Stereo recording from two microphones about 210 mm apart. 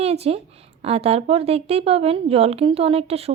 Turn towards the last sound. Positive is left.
turn(degrees=-30)  # may be behind; listen again after turning